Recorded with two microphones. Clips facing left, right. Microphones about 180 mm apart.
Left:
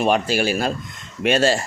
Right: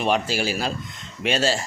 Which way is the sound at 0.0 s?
55° left (ahead or behind).